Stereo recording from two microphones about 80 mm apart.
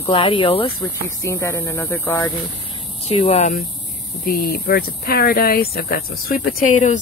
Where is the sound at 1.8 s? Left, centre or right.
Left.